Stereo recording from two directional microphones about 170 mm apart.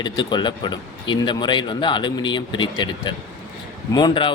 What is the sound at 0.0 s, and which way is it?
A man's voice, 25° left (ahead or behind).